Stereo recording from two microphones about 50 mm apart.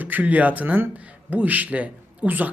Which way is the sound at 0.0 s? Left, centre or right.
Right.